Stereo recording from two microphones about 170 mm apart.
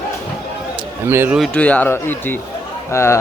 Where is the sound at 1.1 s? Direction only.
10° right (ahead or behind).